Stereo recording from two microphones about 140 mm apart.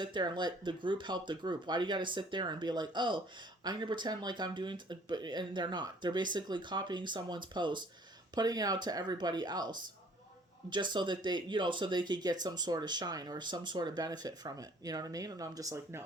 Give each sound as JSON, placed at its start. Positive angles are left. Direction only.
{"t": 0.0, "sound": "speech", "side_deg": -30}